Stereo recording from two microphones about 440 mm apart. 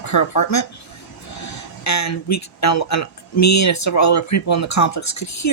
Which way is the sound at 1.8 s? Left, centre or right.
Left.